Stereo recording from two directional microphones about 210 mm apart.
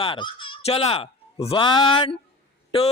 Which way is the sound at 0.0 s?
25° left (ahead or behind).